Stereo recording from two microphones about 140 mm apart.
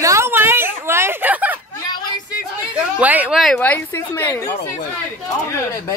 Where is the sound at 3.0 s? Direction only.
10° right (ahead or behind).